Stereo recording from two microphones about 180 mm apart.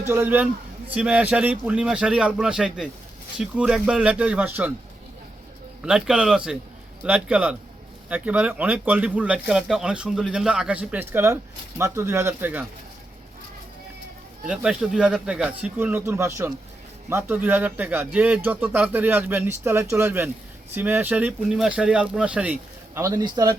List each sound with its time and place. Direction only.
0.0 s speech: 15° right (ahead or behind)
5.8 s speech: 5° right (ahead or behind)
14.4 s speech: 5° right (ahead or behind)
23.0 s speech: 20° right (ahead or behind)